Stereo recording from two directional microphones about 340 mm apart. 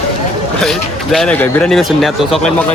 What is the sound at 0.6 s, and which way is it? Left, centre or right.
Speech, centre.